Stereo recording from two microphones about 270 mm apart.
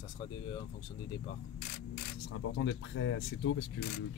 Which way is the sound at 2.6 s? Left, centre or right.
Left.